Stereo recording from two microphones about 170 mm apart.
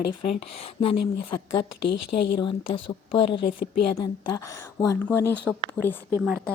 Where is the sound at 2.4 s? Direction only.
30° left (ahead or behind).